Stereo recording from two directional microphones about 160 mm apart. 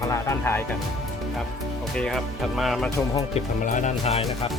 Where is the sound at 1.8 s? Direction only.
5° left (ahead or behind).